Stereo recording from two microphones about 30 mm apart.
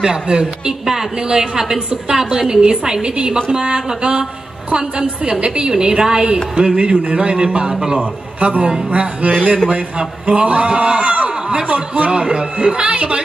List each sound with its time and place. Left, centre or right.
0.0 s speech: right
0.8 s a woman's voice: centre; by 7.3 s right
8.4 s a woman's voice: right
12.1 s speech: right